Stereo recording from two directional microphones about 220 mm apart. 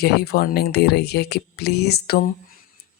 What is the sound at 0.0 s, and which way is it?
Speech, 45° left (ahead or behind).